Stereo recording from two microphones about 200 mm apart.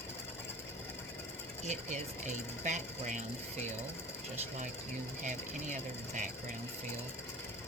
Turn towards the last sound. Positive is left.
turn(degrees=-40)  # may be behind; listen again after turning